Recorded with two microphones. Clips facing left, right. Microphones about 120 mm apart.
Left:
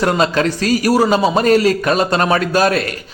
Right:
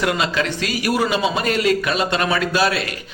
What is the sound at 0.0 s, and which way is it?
A man's voice, 40° left (ahead or behind).